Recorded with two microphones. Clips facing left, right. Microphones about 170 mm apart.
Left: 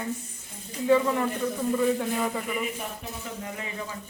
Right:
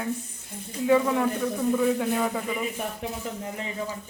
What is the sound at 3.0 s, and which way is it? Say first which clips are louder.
Speech: right 6 dB; 90° right.